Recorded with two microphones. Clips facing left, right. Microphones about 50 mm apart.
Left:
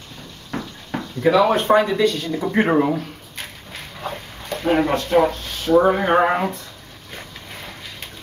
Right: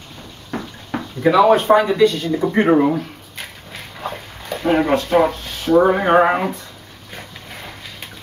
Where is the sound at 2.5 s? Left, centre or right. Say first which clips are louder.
Right 2 dB; centre.